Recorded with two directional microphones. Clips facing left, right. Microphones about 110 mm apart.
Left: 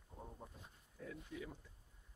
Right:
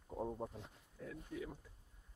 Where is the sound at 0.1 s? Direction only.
55° right (ahead or behind).